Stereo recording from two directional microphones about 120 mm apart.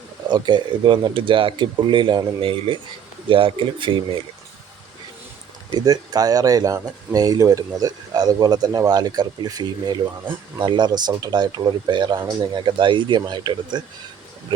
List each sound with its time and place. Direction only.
0.3 s speech: 40° right (ahead or behind)
5.7 s speech: 35° right (ahead or behind)